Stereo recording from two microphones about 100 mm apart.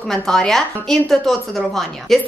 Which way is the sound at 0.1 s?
5° left (ahead or behind).